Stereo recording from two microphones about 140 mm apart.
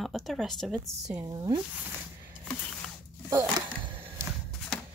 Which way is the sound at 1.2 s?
30° right (ahead or behind).